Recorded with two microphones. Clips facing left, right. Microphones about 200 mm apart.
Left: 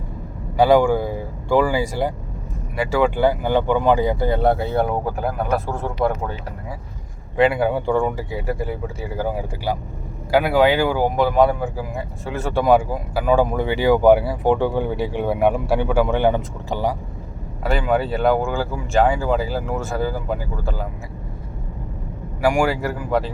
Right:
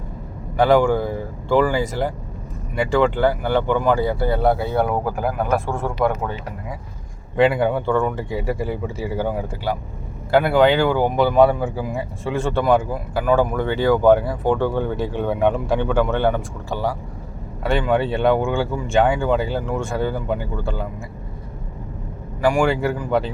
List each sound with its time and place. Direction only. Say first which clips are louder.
0.5 s speech: left 1 dB; 10° left (ahead or behind)
7.3 s speech: even; centre (ahead or behind)
8.3 s speech: right 1 dB; centre (ahead or behind)
9.7 s speech: even; 15° left (ahead or behind)
17.6 s speech: right 1 dB; centre (ahead or behind)
22.4 s speech: right 1 dB; 10° left (ahead or behind)